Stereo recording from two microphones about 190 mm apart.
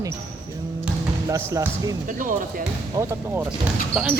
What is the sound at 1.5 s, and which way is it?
Speech, 15° right (ahead or behind).